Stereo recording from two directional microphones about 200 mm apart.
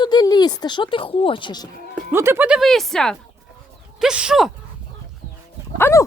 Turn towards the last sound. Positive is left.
turn(degrees=10)  # may be behind; listen again after turning